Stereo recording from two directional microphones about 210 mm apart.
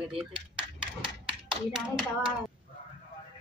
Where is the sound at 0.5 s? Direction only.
5° right (ahead or behind).